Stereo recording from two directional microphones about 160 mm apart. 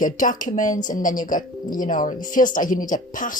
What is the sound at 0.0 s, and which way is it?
A woman's voice, 55° left (ahead or behind).